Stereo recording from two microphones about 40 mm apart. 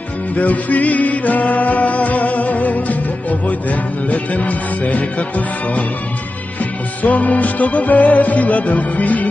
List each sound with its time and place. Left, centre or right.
0.4 s music: left
7.0 s music: left